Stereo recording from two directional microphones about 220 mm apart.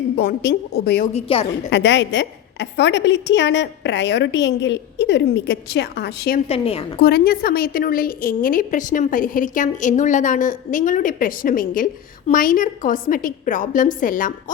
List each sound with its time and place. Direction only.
0.2 s a woman's voice: 50° left (ahead or behind)
1.1 s a woman's voice: 25° left (ahead or behind)
1.7 s a woman's voice: 55° left (ahead or behind)
6.5 s a woman's voice: 25° left (ahead or behind)
7.0 s a woman's voice: 45° left (ahead or behind)